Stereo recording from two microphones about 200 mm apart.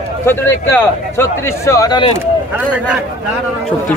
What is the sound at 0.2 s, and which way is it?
Speech, 10° left (ahead or behind).